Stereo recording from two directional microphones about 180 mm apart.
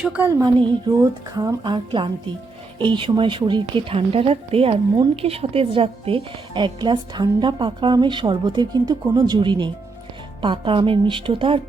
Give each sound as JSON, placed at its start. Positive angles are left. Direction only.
{"t": 0.0, "sound": "speech", "side_deg": -5}
{"t": 1.4, "sound": "a woman's voice", "side_deg": -25}